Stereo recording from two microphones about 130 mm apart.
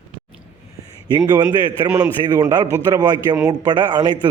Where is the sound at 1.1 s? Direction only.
30° right (ahead or behind).